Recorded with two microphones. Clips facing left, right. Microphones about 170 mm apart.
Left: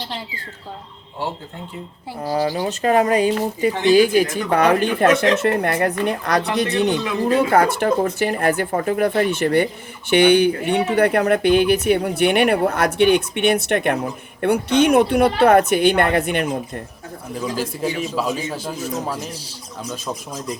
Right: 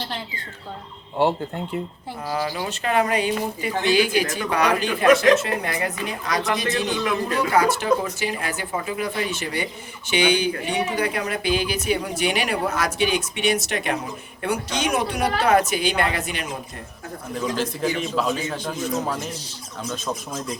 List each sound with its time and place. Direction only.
1.2 s speech: 65° right (ahead or behind)
2.2 s speech: 35° left (ahead or behind); by 16.8 s 55° left (ahead or behind)
17.3 s a man's voice: 5° left (ahead or behind)